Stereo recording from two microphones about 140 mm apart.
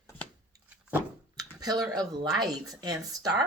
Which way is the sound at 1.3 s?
25° right (ahead or behind).